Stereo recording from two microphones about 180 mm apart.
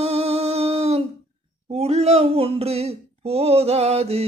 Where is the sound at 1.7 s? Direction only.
35° right (ahead or behind).